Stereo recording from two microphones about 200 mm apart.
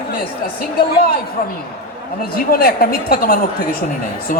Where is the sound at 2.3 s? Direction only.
50° left (ahead or behind).